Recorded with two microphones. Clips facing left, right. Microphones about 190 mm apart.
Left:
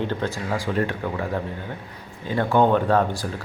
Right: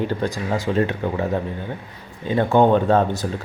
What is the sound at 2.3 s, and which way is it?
Speech, 20° right (ahead or behind).